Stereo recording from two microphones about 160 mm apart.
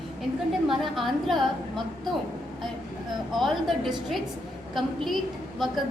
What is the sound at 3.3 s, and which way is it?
A woman's voice, centre (ahead or behind).